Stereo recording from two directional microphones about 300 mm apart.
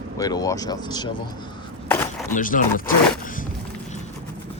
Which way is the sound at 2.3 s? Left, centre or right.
Left.